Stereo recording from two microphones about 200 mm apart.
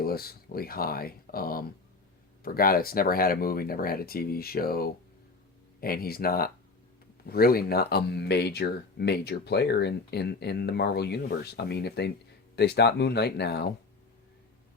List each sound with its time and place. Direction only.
0.0 s speech: 50° left (ahead or behind)